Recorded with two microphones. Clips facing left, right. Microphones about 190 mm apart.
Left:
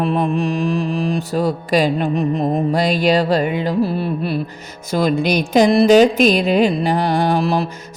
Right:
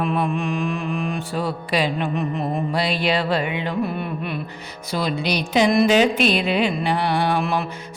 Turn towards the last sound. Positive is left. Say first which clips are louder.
# left 4 dB
turn(degrees=35)  # may be behind; listen again after turning